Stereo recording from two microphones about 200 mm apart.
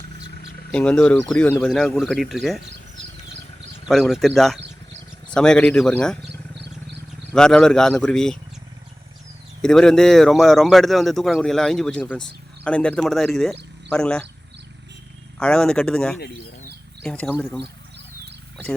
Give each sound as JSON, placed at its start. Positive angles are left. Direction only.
{"t": 0.7, "sound": "a man's voice", "side_deg": 5}
{"t": 3.8, "sound": "a man's voice", "side_deg": 0}
{"t": 6.6, "sound": "vehicle", "side_deg": -55}
{"t": 7.3, "sound": "a man's voice", "side_deg": 5}
{"t": 9.6, "sound": "a man's voice", "side_deg": 5}
{"t": 15.4, "sound": "a man's voice", "side_deg": 5}